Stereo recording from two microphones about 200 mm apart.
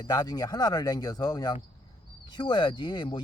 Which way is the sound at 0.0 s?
20° left (ahead or behind).